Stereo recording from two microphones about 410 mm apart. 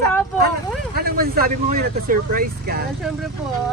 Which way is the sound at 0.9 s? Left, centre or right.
Right.